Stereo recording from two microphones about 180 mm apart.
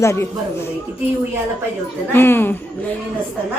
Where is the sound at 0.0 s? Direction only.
15° left (ahead or behind).